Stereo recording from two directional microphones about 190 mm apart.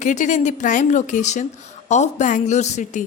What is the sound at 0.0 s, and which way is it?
Speech, 40° left (ahead or behind).